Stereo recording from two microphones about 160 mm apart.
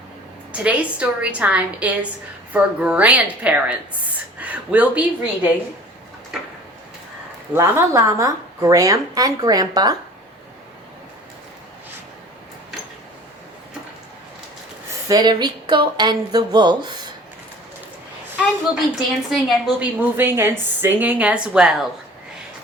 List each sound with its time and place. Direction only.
0.5 s a woman's voice: 5° right (ahead or behind)
7.5 s a woman's voice: 15° right (ahead or behind)
15.0 s a woman's voice: 25° right (ahead or behind)
18.9 s a woman's voice: 5° right (ahead or behind)